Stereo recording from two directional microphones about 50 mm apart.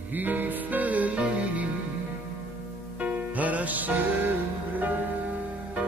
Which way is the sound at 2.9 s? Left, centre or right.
Right.